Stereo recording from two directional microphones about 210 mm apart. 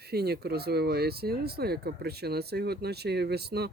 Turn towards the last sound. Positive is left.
turn(degrees=-50)  # may be behind; listen again after turning